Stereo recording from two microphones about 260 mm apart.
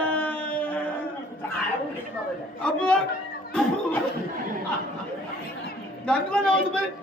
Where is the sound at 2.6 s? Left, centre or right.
Centre.